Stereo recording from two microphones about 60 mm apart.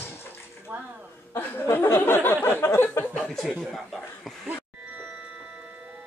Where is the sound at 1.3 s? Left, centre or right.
Left.